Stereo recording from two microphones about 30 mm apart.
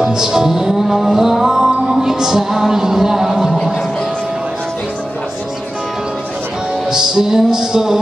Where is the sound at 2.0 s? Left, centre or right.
Centre.